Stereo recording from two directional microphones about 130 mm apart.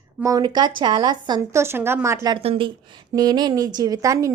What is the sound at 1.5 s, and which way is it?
Speech, 20° right (ahead or behind).